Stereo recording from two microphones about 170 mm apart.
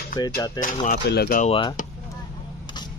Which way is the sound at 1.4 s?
35° left (ahead or behind).